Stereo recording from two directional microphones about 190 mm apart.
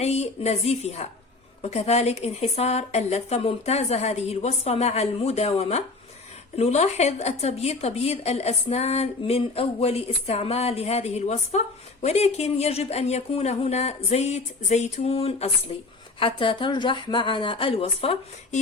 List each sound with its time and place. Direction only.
0.0 s a woman's voice: 35° left (ahead or behind)